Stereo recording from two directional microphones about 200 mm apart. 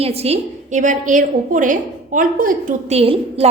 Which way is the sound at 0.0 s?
30° right (ahead or behind).